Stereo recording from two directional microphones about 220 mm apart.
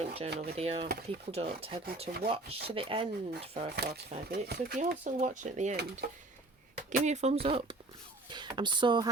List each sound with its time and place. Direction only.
0.0 s drawer open or close: 25° right (ahead or behind)
0.3 s chopping: 25° right (ahead or behind)
3.8 s speech: 45° right (ahead or behind)
4.8 s speech: 35° right (ahead or behind)
6.9 s speech: 30° right (ahead or behind)
7.4 s chopping: 25° right (ahead or behind)